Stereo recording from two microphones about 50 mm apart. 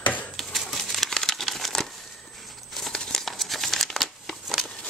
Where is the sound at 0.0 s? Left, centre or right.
Left.